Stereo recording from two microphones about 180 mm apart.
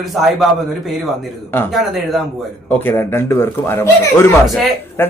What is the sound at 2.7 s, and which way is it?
A man's voice, 10° left (ahead or behind).